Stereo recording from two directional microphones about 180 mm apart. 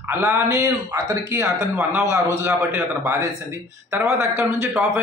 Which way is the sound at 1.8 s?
5° right (ahead or behind).